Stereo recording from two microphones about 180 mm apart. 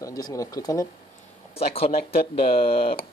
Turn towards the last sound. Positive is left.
turn(degrees=30)  # may be behind; listen again after turning